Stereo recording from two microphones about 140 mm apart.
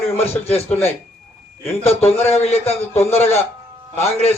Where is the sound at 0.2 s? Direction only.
45° left (ahead or behind).